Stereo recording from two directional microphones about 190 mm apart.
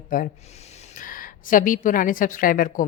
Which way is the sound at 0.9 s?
45° left (ahead or behind).